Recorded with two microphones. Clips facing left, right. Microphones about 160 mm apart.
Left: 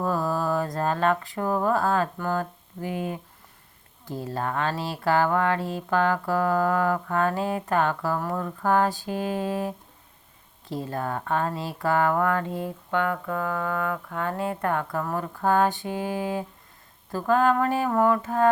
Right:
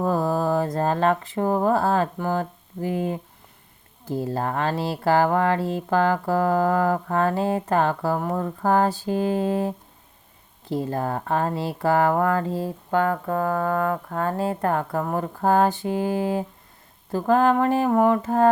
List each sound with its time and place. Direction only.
0.0 s speech: 25° right (ahead or behind)
8.4 s mantra: 30° right (ahead or behind)
10.7 s speech: 30° right (ahead or behind)
14.9 s mantra: 25° right (ahead or behind)
15.3 s speech: 35° right (ahead or behind)
17.2 s mantra: 30° right (ahead or behind)